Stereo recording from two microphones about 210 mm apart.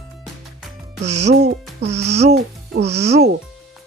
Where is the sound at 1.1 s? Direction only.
90° right.